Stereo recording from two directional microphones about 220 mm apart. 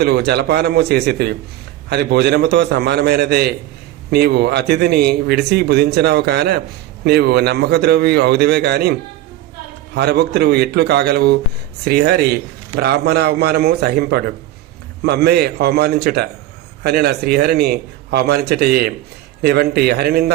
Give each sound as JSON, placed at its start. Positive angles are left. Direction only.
{"t": 0.0, "sound": "a man's voice", "side_deg": -50}